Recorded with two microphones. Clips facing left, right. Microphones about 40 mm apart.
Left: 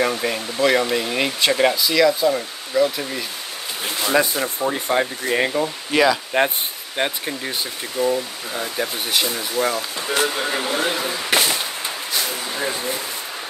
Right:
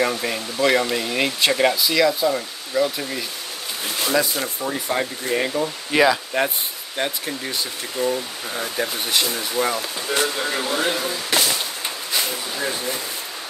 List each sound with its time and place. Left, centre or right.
0.0 s speech: centre
4.6 s speech: left
5.9 s speech: centre
6.3 s speech: left
7.0 s speech: centre
10.0 s speech: centre
11.3 s a sound: left
12.5 s speech: centre